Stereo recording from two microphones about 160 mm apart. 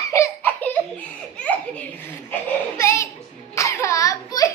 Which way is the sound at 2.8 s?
15° left (ahead or behind).